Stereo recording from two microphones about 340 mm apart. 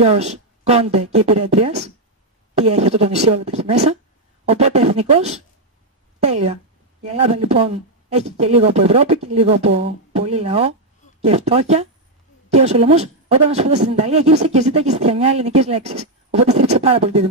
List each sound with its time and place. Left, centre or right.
0.0 s speech: centre